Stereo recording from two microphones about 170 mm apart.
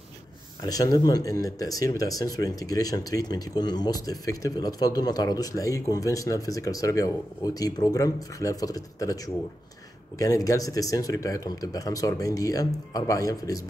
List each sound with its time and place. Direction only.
0.6 s speech: 20° left (ahead or behind)